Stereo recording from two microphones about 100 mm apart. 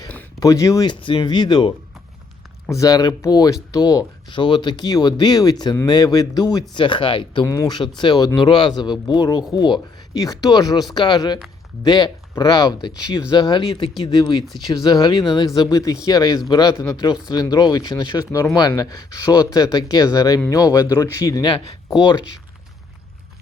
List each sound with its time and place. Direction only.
0.3 s speech: 35° left (ahead or behind)
0.9 s speech: 55° left (ahead or behind)
2.6 s speech: 35° left (ahead or behind)
6.7 s speech: 55° left (ahead or behind)
7.4 s speech: 30° left (ahead or behind)
7.7 s speech: 50° left (ahead or behind)
10.2 s speech: 40° left (ahead or behind)
17.2 s speech: 45° left (ahead or behind)